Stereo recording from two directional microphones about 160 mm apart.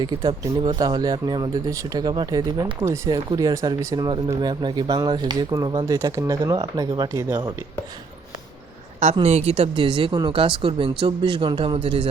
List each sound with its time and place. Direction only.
0.0 s speech: 25° right (ahead or behind)
9.2 s speech: 40° right (ahead or behind)